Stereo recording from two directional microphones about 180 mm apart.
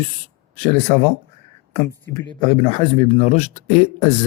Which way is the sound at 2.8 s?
35° left (ahead or behind).